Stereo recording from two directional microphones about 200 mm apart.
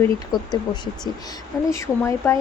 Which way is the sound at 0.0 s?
20° left (ahead or behind).